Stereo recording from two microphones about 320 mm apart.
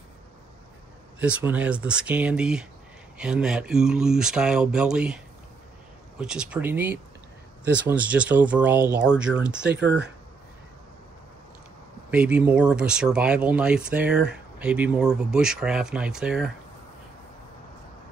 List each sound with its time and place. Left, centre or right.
1.2 s speech: centre
9.7 s speech: right
12.1 s speech: centre